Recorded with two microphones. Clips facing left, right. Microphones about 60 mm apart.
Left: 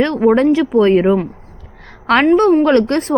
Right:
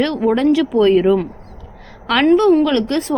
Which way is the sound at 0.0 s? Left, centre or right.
Left.